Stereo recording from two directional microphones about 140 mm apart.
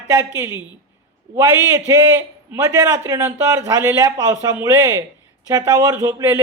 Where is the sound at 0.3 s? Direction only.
15° right (ahead or behind).